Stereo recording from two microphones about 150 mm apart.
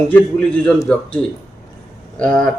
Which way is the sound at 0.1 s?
10° left (ahead or behind).